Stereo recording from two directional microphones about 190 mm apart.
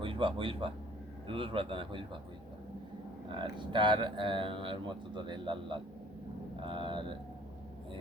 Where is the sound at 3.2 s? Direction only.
25° right (ahead or behind).